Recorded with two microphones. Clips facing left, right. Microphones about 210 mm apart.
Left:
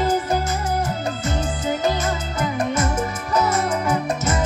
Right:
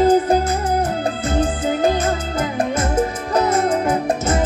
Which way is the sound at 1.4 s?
55° right (ahead or behind).